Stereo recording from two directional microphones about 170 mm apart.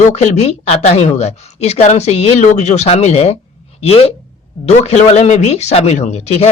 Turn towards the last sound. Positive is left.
turn(degrees=40)  # may be behind; listen again after turning